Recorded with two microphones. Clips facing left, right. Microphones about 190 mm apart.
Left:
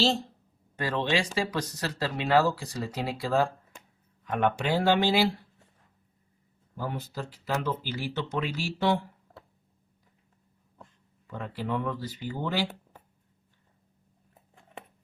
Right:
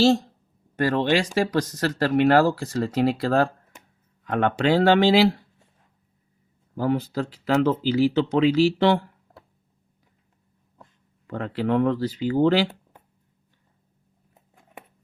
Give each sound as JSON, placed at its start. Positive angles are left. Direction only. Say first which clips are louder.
{"t": 0.9, "sound": "speech", "louder": "right 6 dB", "side_deg": -50}
{"t": 1.8, "sound": "speech", "louder": "right 15 dB", "side_deg": -65}
{"t": 6.7, "sound": "speech", "louder": "right 11 dB", "side_deg": -90}
{"t": 11.3, "sound": "speech", "louder": "right 8 dB", "side_deg": -85}